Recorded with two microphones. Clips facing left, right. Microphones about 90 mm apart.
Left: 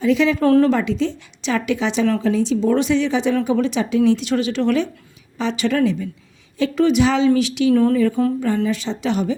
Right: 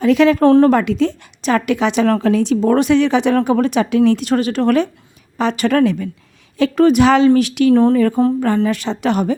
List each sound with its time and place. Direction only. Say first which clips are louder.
0.0 s speech: right 5 dB; 60° right (ahead or behind)
0.4 s speech: right 4 dB; 30° right (ahead or behind)
0.7 s speech: right 4 dB; 55° right (ahead or behind)
7.7 s speech: right 4 dB; 30° right (ahead or behind)
8.4 s speech: right 4 dB; 65° right (ahead or behind)